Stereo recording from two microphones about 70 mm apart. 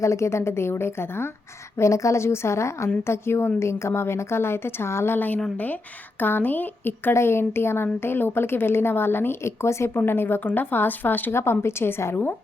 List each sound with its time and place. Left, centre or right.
0.0 s a woman's voice: left
1.8 s a woman's voice: left